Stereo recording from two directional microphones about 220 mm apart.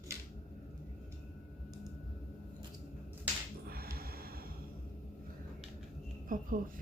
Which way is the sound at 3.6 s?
45° right (ahead or behind).